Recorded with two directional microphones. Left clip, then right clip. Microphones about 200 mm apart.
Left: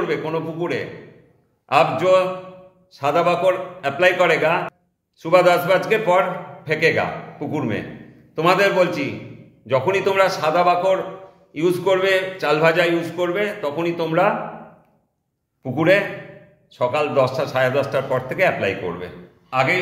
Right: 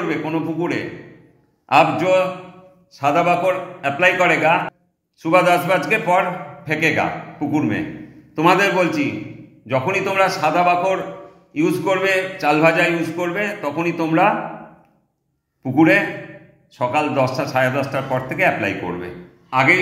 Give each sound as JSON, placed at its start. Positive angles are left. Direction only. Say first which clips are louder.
{"t": 0.1, "sound": "a man's voice", "louder": "right 1 dB", "side_deg": 20}
{"t": 15.6, "sound": "a man's voice", "louder": "right 2 dB", "side_deg": 20}
{"t": 19.5, "sound": "speech", "louder": "right 4 dB", "side_deg": 10}